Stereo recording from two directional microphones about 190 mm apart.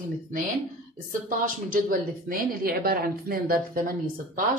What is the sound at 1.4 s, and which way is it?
A woman's voice, 45° right (ahead or behind).